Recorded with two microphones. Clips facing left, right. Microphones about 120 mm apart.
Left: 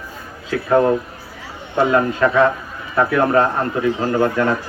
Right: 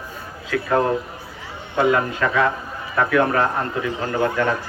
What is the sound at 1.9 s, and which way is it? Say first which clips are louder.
Speech: left 4 dB; 30° left (ahead or behind).